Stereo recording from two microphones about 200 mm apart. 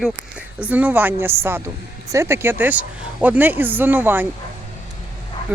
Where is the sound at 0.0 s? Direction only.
5° right (ahead or behind).